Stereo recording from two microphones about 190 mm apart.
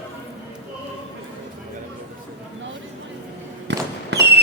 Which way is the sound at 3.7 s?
65° right (ahead or behind).